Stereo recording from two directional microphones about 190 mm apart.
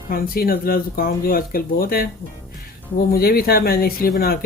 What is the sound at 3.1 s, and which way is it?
Speech, 50° left (ahead or behind).